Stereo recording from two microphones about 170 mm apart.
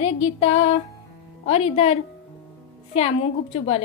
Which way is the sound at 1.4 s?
35° left (ahead or behind).